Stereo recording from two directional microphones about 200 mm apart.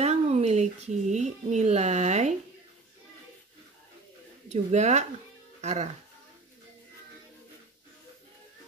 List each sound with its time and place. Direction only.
0.0 s speech: 30° right (ahead or behind)
4.5 s speech: 35° right (ahead or behind)